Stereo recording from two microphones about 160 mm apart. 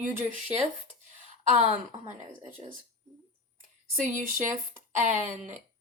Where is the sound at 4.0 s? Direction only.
55° right (ahead or behind).